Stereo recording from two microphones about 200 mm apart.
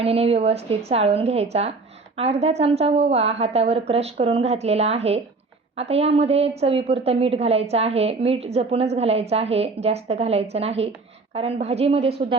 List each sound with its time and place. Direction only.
0.0 s a woman's voice: 30° right (ahead or behind)